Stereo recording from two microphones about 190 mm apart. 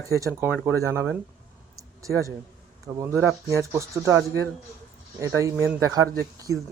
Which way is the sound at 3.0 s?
15° right (ahead or behind).